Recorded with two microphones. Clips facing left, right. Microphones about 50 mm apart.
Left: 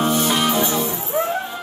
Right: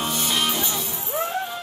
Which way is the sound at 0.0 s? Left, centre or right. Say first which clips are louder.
Left 8 dB; centre.